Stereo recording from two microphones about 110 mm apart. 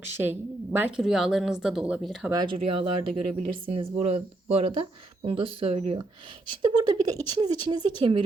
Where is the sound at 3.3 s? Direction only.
45° right (ahead or behind).